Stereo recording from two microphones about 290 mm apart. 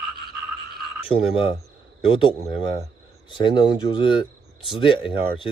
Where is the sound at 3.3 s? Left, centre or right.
Centre.